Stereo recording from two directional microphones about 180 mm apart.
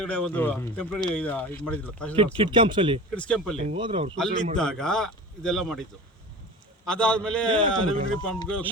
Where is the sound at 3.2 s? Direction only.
5° left (ahead or behind).